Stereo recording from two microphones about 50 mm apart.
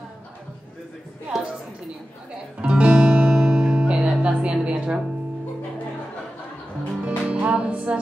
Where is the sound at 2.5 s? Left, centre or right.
Right.